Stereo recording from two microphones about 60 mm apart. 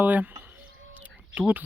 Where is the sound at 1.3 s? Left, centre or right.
Right.